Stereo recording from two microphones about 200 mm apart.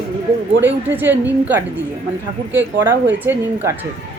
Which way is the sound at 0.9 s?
10° right (ahead or behind).